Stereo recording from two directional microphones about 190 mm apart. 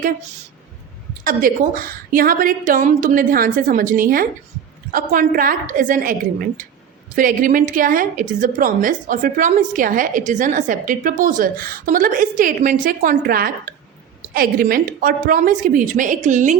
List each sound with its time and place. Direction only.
1.2 s a woman's voice: 50° right (ahead or behind)
7.2 s a woman's voice: 45° right (ahead or behind)